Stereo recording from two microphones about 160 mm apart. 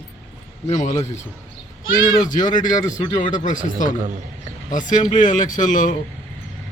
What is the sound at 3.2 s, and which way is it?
Speech, 55° left (ahead or behind).